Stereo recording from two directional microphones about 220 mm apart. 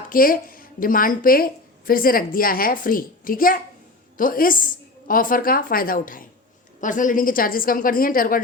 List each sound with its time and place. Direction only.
0.1 s a woman's voice: 40° left (ahead or behind)